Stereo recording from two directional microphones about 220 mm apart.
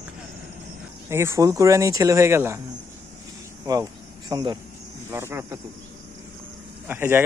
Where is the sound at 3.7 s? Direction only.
15° right (ahead or behind).